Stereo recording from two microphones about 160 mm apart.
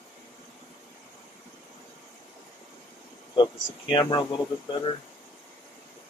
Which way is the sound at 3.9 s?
30° left (ahead or behind).